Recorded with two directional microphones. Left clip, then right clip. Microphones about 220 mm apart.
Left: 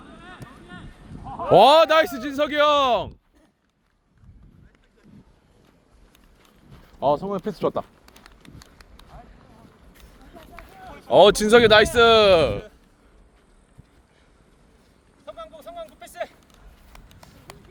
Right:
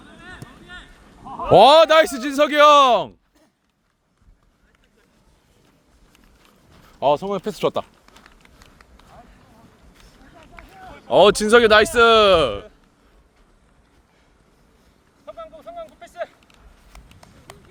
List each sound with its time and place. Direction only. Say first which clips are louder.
1.2 s a man's voice: right 3 dB; 15° right (ahead or behind)
7.0 s speech: right 3 dB; 35° right (ahead or behind)
8.0 s run: even; 45° left (ahead or behind)
11.1 s speech: right 1 dB; 5° right (ahead or behind)
15.3 s a sound: right 2 dB; 45° left (ahead or behind)
16.9 s a sound: right 1 dB; 5° left (ahead or behind)